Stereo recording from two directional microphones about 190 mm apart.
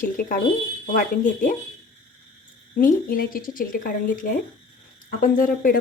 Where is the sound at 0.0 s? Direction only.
45° left (ahead or behind).